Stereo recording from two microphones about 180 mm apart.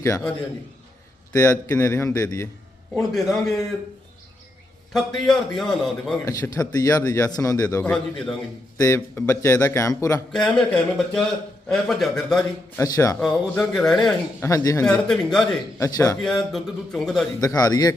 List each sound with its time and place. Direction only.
0.0 s a man's voice: 15° left (ahead or behind)
3.2 s a man's voice: centre (ahead or behind)
4.9 s a man's voice: centre (ahead or behind)
6.2 s a man's voice: 20° left (ahead or behind)
7.9 s a man's voice: 5° left (ahead or behind)
8.8 s a man's voice: 15° left (ahead or behind)
10.3 s a man's voice: 5° left (ahead or behind)
12.7 s a man's voice: 15° left (ahead or behind)
13.1 s a man's voice: 5° left (ahead or behind)
14.4 s a man's voice: 15° left (ahead or behind)
15.0 s a man's voice: 5° left (ahead or behind)
15.8 s a man's voice: 15° left (ahead or behind)
16.2 s a man's voice: centre (ahead or behind)
17.4 s a man's voice: 20° left (ahead or behind)